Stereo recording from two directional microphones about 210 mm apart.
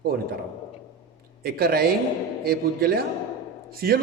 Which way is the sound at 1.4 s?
45° right (ahead or behind).